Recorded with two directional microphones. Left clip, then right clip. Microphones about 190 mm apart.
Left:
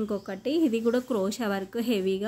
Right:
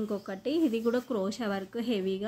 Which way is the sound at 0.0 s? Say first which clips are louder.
Left 3 dB; 15° left (ahead or behind).